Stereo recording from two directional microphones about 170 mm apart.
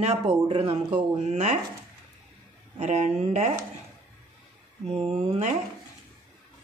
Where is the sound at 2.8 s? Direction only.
40° right (ahead or behind).